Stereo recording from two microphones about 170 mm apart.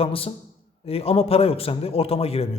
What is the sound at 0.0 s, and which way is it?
A man's voice, 35° left (ahead or behind).